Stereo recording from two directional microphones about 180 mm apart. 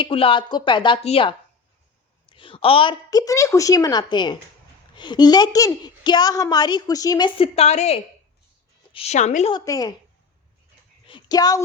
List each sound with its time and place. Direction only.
0.0 s a woman's voice: 30° left (ahead or behind)
9.5 s a woman's voice: 20° left (ahead or behind)
11.0 s speech: 25° left (ahead or behind)